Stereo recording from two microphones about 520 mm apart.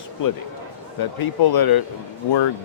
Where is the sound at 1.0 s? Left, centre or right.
Left.